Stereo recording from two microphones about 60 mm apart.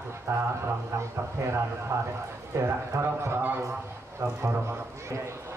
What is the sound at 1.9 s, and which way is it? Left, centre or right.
A man's voice, right.